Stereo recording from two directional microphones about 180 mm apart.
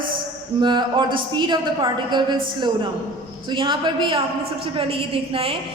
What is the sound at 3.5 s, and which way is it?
A man's voice, 25° right (ahead or behind).